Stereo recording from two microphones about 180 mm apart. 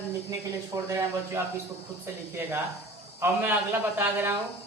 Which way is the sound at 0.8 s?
15° right (ahead or behind).